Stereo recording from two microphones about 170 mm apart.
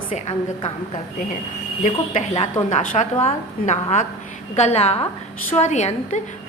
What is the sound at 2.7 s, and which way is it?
A woman's voice, 45° left (ahead or behind).